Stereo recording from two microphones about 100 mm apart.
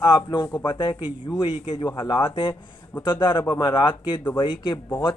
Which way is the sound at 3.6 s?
55° left (ahead or behind).